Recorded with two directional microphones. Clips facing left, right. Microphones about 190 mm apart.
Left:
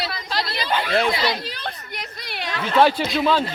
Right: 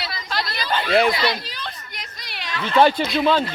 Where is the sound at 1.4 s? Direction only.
55° left (ahead or behind).